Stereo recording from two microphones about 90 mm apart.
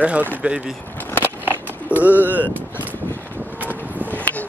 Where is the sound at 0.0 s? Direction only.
15° right (ahead or behind).